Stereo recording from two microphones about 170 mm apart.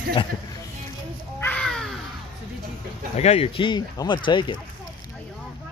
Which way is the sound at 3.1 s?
40° left (ahead or behind).